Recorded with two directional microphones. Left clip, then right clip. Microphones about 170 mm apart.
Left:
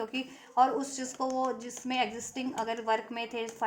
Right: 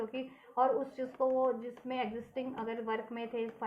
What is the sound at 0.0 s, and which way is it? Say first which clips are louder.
A woman's voice: left 3 dB; 40° left (ahead or behind).